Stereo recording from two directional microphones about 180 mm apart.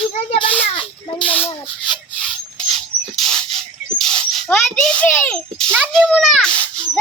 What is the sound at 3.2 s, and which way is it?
Bird, 30° right (ahead or behind).